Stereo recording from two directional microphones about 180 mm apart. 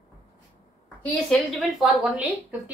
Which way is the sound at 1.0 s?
Centre (ahead or behind).